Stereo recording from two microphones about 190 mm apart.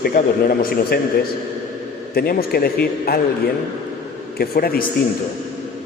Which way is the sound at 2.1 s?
55° left (ahead or behind).